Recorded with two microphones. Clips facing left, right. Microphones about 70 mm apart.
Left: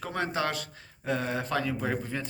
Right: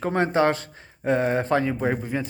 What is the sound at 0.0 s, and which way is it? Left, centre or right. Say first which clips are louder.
Speech: right 9 dB; right.